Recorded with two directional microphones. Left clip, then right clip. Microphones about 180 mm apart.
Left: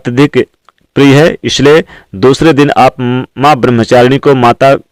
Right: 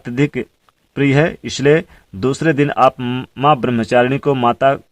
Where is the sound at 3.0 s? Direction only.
25° left (ahead or behind).